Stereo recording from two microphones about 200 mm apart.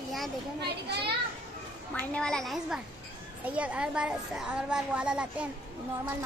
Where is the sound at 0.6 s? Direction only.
55° right (ahead or behind).